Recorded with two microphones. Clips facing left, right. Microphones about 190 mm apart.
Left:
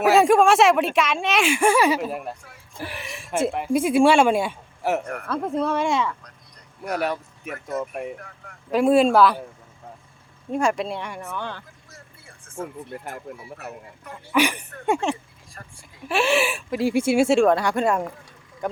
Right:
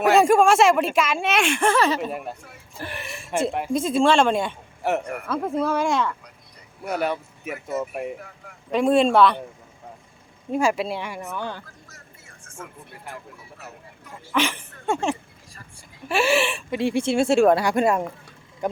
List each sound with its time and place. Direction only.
0.0 s speech: centre (ahead or behind)
10.5 s speech: 5° right (ahead or behind)
12.5 s a sound: 35° left (ahead or behind)
12.9 s a man's voice: 50° left (ahead or behind)
14.3 s speech: 15° left (ahead or behind)
16.0 s speech: centre (ahead or behind)